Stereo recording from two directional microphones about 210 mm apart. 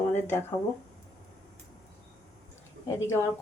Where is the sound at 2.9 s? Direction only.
10° left (ahead or behind).